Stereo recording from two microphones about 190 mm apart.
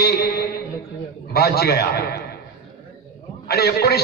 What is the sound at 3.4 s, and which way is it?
Speech, 55° left (ahead or behind).